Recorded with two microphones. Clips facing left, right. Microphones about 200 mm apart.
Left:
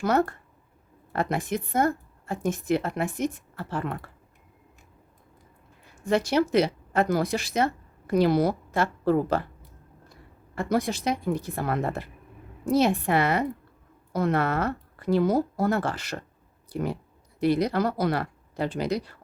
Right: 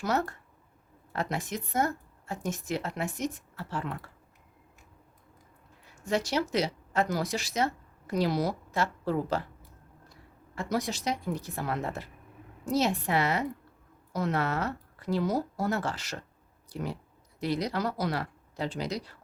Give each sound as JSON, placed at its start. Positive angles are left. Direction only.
{"t": 0.0, "sound": "a woman's voice", "side_deg": 55}
{"t": 5.9, "sound": "speech", "side_deg": 55}
{"t": 10.5, "sound": "a woman's voice", "side_deg": 55}